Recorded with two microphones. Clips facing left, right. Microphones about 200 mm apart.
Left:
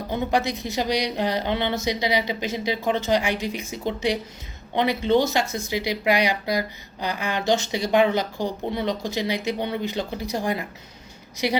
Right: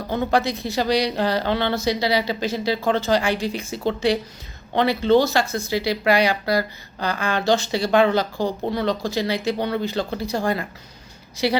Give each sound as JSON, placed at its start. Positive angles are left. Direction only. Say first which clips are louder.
{"t": 0.1, "sound": "a woman's voice", "louder": "right 3 dB", "side_deg": 15}